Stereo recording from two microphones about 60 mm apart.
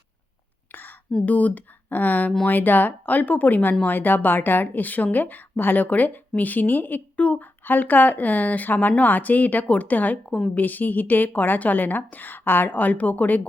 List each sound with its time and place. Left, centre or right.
0.7 s whispering: left
1.2 s a woman's voice: left
10.2 s a woman's voice: centre
10.6 s a woman's voice: left